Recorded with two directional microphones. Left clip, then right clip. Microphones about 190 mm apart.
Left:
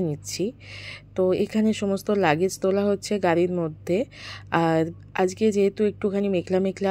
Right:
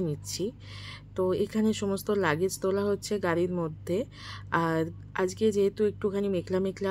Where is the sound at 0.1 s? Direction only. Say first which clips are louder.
Left 5 dB; 15° left (ahead or behind).